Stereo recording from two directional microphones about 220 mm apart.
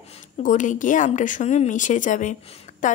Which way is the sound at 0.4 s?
35° left (ahead or behind).